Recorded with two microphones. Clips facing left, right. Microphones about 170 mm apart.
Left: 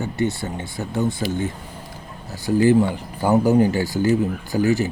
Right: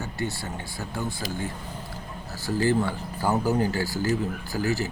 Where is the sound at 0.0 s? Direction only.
20° left (ahead or behind).